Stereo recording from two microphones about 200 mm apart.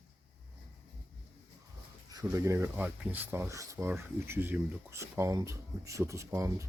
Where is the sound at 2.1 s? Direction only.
15° right (ahead or behind).